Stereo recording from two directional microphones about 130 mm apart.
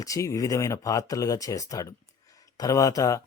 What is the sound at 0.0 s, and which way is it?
A man's voice, 25° left (ahead or behind).